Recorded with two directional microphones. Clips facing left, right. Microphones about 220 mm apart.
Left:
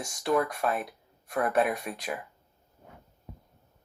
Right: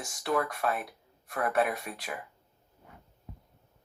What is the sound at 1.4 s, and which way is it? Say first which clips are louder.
Speech: left 1 dB; 45° left (ahead or behind).